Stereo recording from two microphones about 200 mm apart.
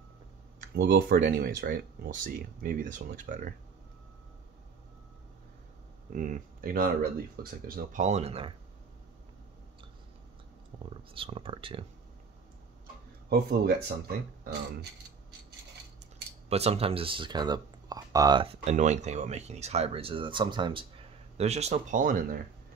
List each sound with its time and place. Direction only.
0.7 s speech: 50° right (ahead or behind)
6.1 s speech: 40° right (ahead or behind)
10.9 s speech: 25° right (ahead or behind)
13.3 s speech: 50° right (ahead or behind)
16.0 s speech: 30° right (ahead or behind)